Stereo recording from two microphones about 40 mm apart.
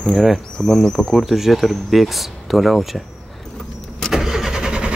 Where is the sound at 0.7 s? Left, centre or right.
Centre.